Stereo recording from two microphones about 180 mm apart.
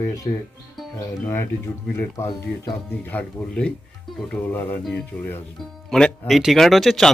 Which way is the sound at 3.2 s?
5° left (ahead or behind).